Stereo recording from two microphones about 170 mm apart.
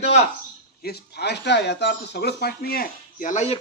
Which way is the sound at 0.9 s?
80° left.